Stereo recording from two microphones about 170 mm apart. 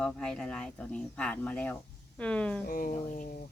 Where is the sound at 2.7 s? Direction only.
55° left (ahead or behind).